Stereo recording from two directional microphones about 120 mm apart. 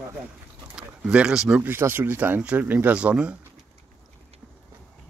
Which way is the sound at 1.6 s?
20° right (ahead or behind).